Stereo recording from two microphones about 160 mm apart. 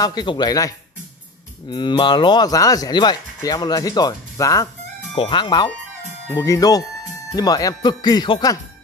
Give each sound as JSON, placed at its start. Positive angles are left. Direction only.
{"t": 0.0, "sound": "speech", "side_deg": 25}
{"t": 5.1, "sound": "speech", "side_deg": 30}